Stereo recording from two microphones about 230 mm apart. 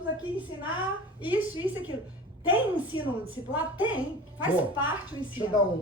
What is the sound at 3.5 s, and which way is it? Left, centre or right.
A woman's voice, centre.